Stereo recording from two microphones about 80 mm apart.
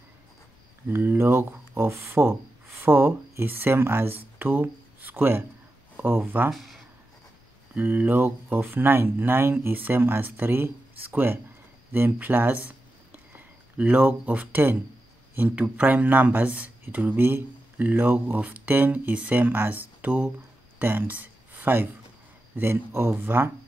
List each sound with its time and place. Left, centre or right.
0.8 s speech: right
6.5 s speech: centre
7.7 s speech: centre